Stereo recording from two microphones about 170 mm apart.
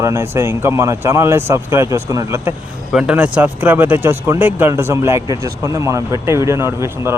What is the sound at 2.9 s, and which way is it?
Speech, 5° right (ahead or behind).